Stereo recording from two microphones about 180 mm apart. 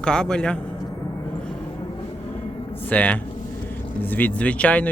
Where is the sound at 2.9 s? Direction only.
10° left (ahead or behind).